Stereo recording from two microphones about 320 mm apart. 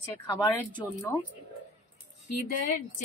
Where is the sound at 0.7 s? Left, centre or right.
Centre.